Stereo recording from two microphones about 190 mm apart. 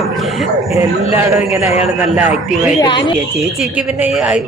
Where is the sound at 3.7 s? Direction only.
5° right (ahead or behind).